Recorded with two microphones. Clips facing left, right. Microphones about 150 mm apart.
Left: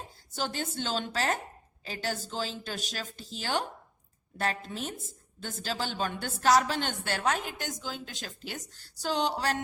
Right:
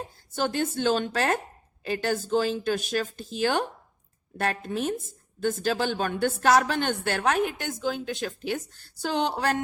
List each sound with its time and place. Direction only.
0.3 s a woman's voice: 55° right (ahead or behind)